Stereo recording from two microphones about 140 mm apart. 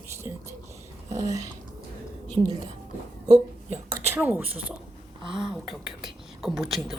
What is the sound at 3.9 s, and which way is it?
Speech, 15° right (ahead or behind).